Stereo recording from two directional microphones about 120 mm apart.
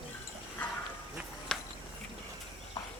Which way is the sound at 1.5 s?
5° left (ahead or behind).